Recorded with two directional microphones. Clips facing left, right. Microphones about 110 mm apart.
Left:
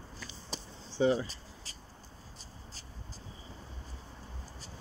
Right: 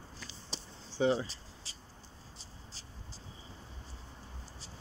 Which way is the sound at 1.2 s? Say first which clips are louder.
Left 1 dB; 45° left (ahead or behind).